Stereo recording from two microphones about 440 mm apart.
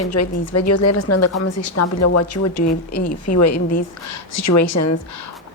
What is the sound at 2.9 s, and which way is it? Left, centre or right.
Speech, centre.